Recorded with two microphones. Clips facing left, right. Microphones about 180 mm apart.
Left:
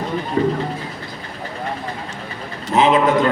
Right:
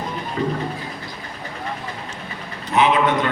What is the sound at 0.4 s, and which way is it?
Speech, 35° left (ahead or behind).